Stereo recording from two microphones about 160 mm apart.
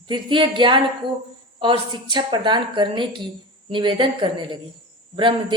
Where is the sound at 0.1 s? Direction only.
30° right (ahead or behind).